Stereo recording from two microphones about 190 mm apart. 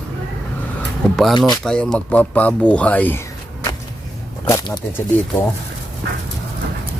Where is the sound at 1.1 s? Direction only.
Centre (ahead or behind).